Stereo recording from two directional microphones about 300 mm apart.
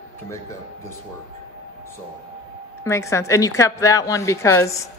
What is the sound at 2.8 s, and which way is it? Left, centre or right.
A man's voice, centre.